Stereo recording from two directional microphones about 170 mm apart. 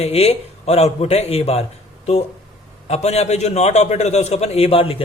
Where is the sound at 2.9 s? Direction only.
40° left (ahead or behind).